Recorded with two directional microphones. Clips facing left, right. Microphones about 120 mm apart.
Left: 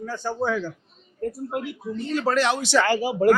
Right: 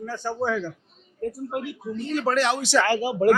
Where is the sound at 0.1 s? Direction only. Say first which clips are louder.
Left 1 dB; 25° left (ahead or behind).